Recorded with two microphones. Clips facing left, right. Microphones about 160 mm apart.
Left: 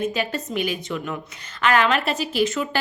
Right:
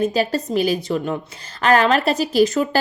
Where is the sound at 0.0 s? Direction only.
35° right (ahead or behind).